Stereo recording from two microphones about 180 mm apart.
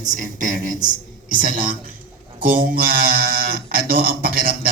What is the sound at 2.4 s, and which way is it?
Speech, 50° right (ahead or behind).